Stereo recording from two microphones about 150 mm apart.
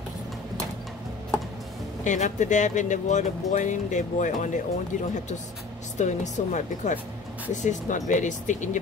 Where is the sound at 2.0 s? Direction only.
55° left (ahead or behind).